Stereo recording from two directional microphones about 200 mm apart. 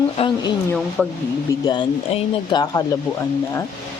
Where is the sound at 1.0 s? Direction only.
5° left (ahead or behind).